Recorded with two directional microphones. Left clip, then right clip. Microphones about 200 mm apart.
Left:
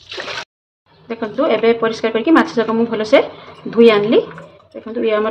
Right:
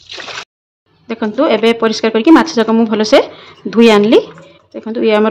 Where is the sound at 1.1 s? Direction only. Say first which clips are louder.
Right 4 dB; 50° right (ahead or behind).